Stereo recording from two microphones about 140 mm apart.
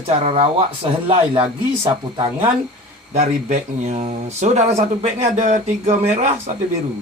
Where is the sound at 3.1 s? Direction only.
55° right (ahead or behind).